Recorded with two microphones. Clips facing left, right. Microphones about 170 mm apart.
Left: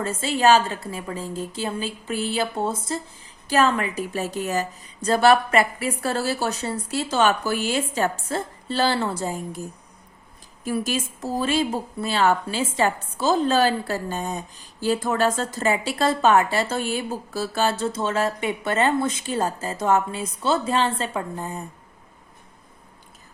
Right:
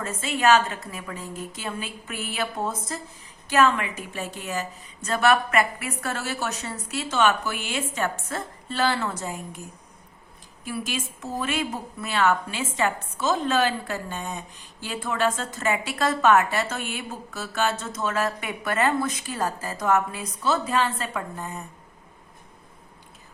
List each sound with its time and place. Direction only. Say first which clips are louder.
0.0 s a woman's voice: left 3 dB; 30° left (ahead or behind)
10.6 s a woman's voice: left 6 dB; 40° left (ahead or behind)